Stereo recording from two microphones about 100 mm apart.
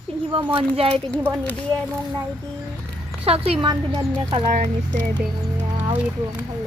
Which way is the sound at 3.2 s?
80° right.